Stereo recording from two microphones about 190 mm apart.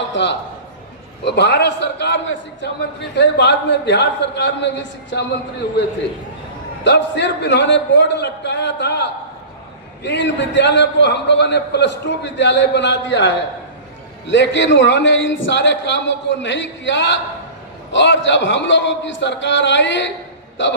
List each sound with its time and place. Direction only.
0.1 s a man's voice: 70° left (ahead or behind)
6.8 s a man's voice: 65° left (ahead or behind)